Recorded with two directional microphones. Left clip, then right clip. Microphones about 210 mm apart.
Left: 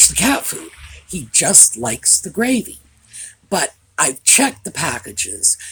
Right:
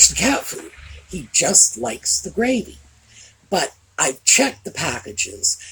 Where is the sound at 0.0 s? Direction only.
45° left (ahead or behind).